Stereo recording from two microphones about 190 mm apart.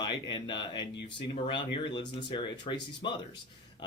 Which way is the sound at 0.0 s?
25° left (ahead or behind).